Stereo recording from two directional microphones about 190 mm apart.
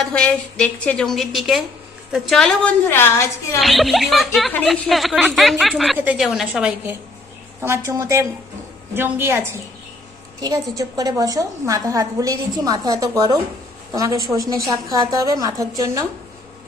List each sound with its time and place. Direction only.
0.0 s a woman's voice: 5° left (ahead or behind)
3.6 s a woman's voice: centre (ahead or behind); by 16.0 s 15° right (ahead or behind)